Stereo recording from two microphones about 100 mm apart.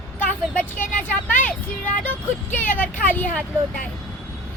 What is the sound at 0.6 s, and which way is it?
Vehicle, 20° left (ahead or behind).